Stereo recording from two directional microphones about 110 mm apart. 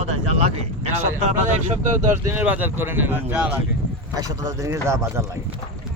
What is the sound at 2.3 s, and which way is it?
Speech, 15° right (ahead or behind).